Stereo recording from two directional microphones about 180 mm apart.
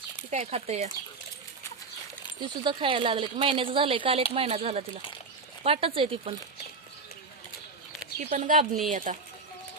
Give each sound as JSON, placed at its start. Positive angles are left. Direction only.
{"t": 0.3, "sound": "speech", "side_deg": -35}
{"t": 2.4, "sound": "speech", "side_deg": -25}
{"t": 8.2, "sound": "speech", "side_deg": -45}